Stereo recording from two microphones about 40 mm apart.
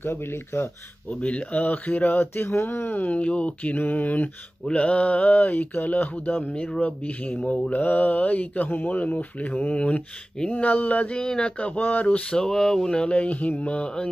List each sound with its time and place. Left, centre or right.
0.0 s speech: left
1.2 s speech: left
2.0 s speech: left
3.1 s speech: left
3.7 s mantra: left
4.6 s speech: left
6.5 s speech: left
7.7 s speech: left
11.1 s speech: centre
11.5 s speech: left
12.2 s speech: left
13.1 s speech: left